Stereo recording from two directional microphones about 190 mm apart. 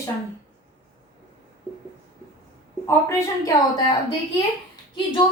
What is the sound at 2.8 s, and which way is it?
Speech, 15° left (ahead or behind).